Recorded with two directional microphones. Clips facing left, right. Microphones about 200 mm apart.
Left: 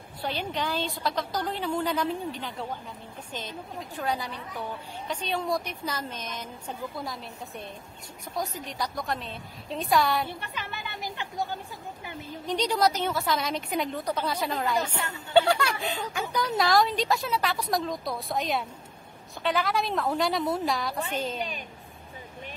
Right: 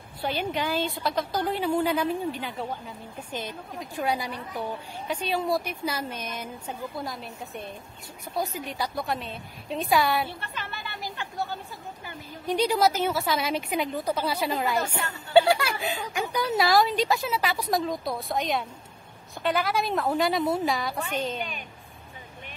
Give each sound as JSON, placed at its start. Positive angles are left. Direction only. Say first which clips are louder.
{"t": 0.3, "sound": "speech", "louder": "right 3 dB", "side_deg": -5}
{"t": 10.4, "sound": "chatter", "louder": "even", "side_deg": 15}
{"t": 12.4, "sound": "speech", "louder": "right 2 dB", "side_deg": -5}